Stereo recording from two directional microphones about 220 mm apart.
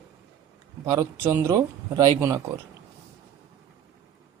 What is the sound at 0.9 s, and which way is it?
Speech, 15° right (ahead or behind).